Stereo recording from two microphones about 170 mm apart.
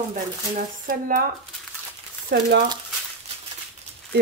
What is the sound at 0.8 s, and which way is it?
Speech, 55° right (ahead or behind).